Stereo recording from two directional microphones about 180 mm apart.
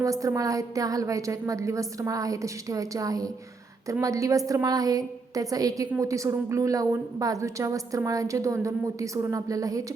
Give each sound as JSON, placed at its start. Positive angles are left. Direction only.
{"t": 0.0, "sound": "a woman's voice", "side_deg": -20}